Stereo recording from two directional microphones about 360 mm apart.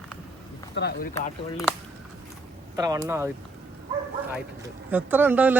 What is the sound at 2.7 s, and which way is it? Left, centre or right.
Speech, centre.